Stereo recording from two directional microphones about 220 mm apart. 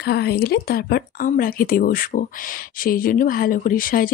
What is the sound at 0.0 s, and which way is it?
Speech, 45° left (ahead or behind).